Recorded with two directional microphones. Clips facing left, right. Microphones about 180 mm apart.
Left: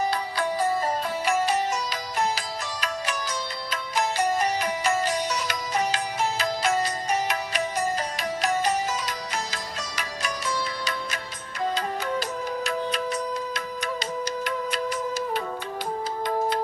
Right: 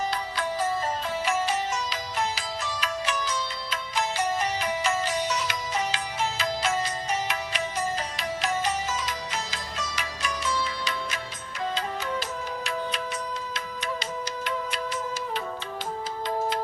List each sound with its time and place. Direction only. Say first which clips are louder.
1.5 s music: left 3 dB; 40° left (ahead or behind)